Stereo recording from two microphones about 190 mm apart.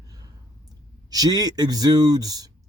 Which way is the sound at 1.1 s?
20° right (ahead or behind).